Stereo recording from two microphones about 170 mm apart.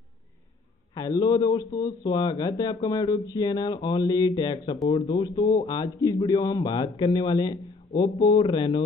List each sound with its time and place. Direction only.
0.9 s a man's voice: 20° left (ahead or behind)